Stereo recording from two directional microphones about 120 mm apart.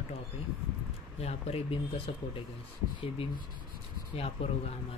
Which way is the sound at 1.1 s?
60° left (ahead or behind).